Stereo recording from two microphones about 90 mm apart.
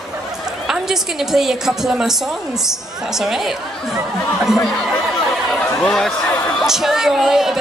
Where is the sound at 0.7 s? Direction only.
5° right (ahead or behind).